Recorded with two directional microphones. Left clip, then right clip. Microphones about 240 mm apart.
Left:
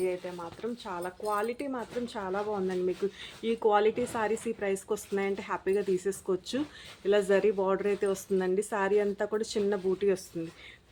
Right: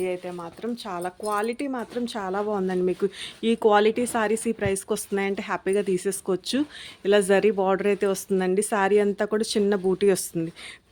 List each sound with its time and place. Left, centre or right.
0.0 s speech: right